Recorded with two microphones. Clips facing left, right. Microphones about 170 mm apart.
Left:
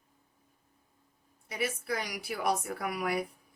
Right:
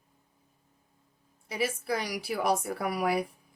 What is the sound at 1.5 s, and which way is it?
A woman's voice, 30° right (ahead or behind).